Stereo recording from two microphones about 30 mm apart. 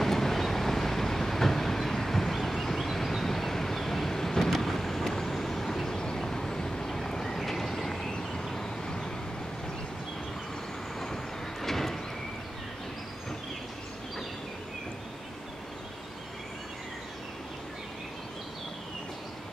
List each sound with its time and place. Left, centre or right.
0.0 s train: centre
5.3 s vehicle: centre
5.9 s a sound: left
7.3 s vehicle: centre; by 9.1 s left
11.6 s vehicle: centre